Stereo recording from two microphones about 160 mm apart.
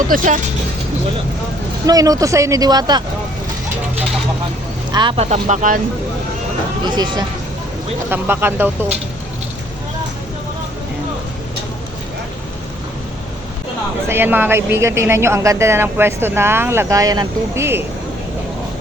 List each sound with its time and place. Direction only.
0.1 s speech: 60° right (ahead or behind)
1.9 s speech: 20° right (ahead or behind)
4.9 s speech: 30° right (ahead or behind); by 5.8 s 50° right (ahead or behind)
6.8 s speech: 25° right (ahead or behind)
8.1 s a woman's voice: 15° right (ahead or behind)
14.1 s a woman's voice: 15° right (ahead or behind)